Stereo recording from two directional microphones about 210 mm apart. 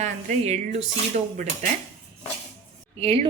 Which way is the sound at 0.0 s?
35° right (ahead or behind).